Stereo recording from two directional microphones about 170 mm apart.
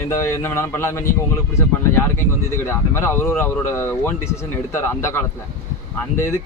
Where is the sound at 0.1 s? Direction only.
15° left (ahead or behind).